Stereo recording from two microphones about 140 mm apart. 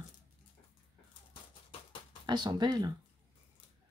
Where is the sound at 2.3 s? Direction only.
30° right (ahead or behind).